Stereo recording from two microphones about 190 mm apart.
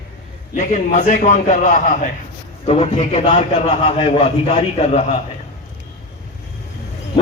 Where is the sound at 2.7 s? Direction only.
30° left (ahead or behind).